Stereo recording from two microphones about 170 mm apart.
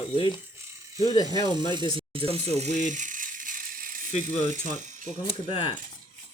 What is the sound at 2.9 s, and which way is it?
Ratchet, 50° right (ahead or behind).